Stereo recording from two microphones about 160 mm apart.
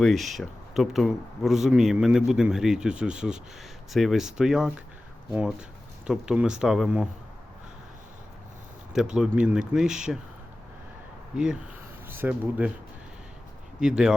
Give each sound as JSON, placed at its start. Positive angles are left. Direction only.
{"t": 0.0, "sound": "speech", "side_deg": 0}
{"t": 9.1, "sound": "speech", "side_deg": -5}
{"t": 12.0, "sound": "speech", "side_deg": -15}
{"t": 13.7, "sound": "speech", "side_deg": -5}